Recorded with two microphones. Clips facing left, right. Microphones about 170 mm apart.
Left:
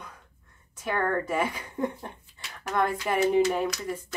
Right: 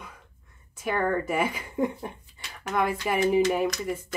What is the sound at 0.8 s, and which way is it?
Speech, 10° right (ahead or behind).